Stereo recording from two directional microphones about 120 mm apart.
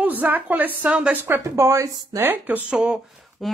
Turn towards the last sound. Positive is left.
turn(degrees=0)  # may be behind; listen again after turning